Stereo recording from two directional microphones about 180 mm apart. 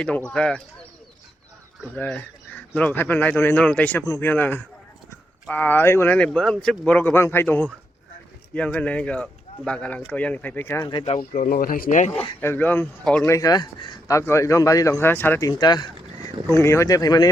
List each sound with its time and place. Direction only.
0.3 s speech: 5° left (ahead or behind)
2.0 s speech: 10° left (ahead or behind)
10.8 s speech: 30° left (ahead or behind)
11.2 s speech: 55° left (ahead or behind)
12.1 s speech: 10° left (ahead or behind)
13.3 s speech: 20° left (ahead or behind)